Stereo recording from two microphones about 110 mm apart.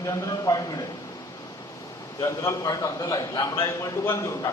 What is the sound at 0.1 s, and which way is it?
Speech, 35° left (ahead or behind).